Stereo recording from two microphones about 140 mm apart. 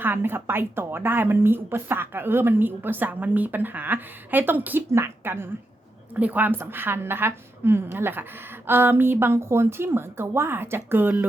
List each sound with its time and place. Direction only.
0.0 s speech: 15° right (ahead or behind)